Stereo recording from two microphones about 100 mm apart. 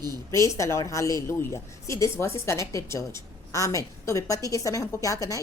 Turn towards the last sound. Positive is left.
turn(degrees=35)  # may be behind; listen again after turning